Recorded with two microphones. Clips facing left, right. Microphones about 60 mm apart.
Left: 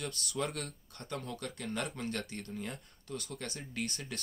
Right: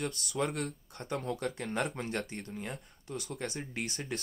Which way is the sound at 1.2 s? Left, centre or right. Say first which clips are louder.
Right 5 dB; right.